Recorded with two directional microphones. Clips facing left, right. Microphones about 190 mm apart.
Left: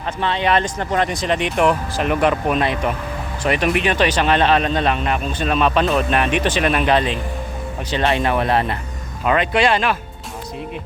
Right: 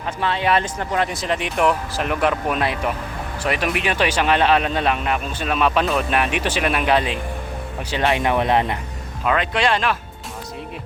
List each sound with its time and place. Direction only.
0.2 s speech: 5° right (ahead or behind)
9.2 s speech: centre (ahead or behind)